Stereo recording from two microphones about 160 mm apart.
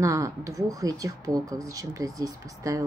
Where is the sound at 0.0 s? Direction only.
20° right (ahead or behind).